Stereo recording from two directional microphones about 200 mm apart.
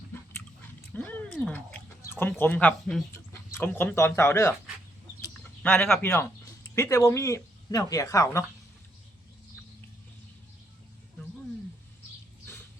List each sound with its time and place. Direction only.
0.9 s a sound: 10° left (ahead or behind)
2.4 s speech: 5° left (ahead or behind)
5.2 s chicken: 5° left (ahead or behind)
6.7 s speech: 15° left (ahead or behind)